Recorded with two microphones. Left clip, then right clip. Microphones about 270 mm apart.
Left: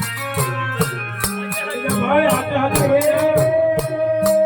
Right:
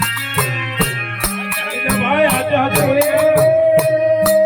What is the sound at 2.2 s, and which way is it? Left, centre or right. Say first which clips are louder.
Music: right 3 dB; centre.